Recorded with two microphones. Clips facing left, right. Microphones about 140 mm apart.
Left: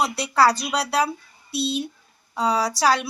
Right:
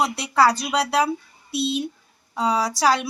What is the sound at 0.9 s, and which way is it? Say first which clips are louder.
A woman's voice: right 2 dB; 10° right (ahead or behind).